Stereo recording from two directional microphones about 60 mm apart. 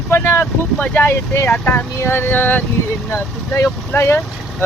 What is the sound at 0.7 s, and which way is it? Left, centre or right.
Speech, left.